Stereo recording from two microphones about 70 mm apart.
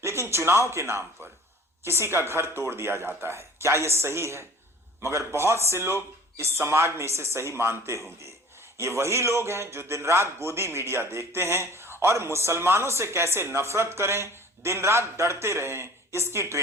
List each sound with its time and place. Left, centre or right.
0.0 s a man's voice: right